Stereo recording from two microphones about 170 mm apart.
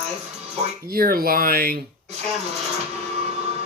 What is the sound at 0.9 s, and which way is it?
Speech, 60° right (ahead or behind).